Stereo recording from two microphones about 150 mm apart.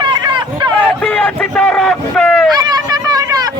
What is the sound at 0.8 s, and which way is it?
Speech, 5° left (ahead or behind).